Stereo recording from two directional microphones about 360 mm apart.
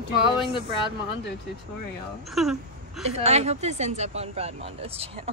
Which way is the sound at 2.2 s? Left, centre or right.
Centre.